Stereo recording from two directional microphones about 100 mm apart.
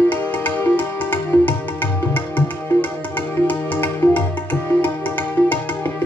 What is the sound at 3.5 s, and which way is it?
Music, 20° left (ahead or behind).